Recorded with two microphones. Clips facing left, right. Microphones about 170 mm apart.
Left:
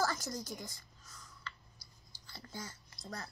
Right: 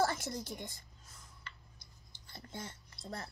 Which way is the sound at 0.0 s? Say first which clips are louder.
Right 2 dB; 25° right (ahead or behind).